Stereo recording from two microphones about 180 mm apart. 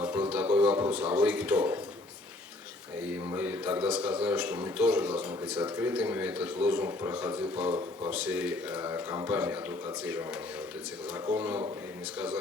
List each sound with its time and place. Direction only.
0.0 s a sound: 10° right (ahead or behind)
3.3 s a man's voice: 10° right (ahead or behind)
7.7 s speech: 25° right (ahead or behind)
8.1 s a man's voice: 5° right (ahead or behind)
11.3 s a man's voice: 10° right (ahead or behind)